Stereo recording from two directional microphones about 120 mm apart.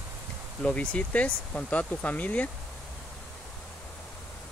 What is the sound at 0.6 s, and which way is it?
Speech, 10° left (ahead or behind).